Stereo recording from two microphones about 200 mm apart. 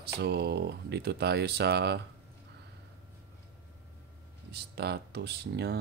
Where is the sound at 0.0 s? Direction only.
55° right (ahead or behind).